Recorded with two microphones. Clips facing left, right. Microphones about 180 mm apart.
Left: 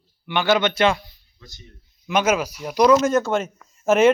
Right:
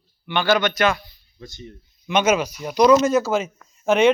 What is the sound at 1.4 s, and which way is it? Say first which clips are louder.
Speech: right 9 dB; 50° right (ahead or behind).